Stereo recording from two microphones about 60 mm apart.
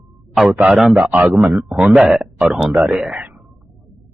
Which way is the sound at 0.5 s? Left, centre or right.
Right.